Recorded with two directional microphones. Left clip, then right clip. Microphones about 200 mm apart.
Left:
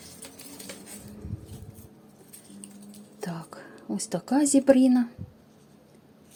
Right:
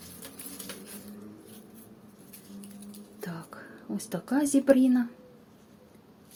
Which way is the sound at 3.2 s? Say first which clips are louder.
Left 3 dB; 20° left (ahead or behind).